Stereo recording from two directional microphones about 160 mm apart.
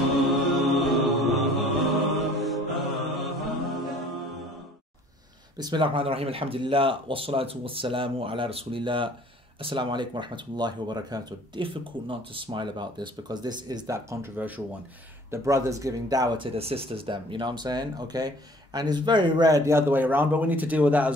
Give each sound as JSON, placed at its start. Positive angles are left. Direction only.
{"t": 0.3, "sound": "mantra", "side_deg": 0}
{"t": 5.6, "sound": "a man's voice", "side_deg": -30}